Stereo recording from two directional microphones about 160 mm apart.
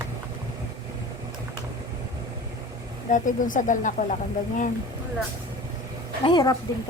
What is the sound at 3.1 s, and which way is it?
Speech, 55° left (ahead or behind).